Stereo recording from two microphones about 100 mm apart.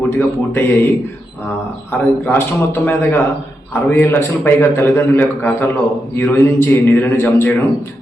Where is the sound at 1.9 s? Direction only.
20° left (ahead or behind).